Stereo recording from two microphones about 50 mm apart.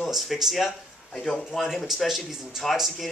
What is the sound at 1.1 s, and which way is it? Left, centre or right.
Speech, centre.